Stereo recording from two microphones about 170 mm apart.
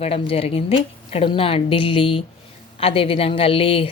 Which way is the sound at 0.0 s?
35° left (ahead or behind).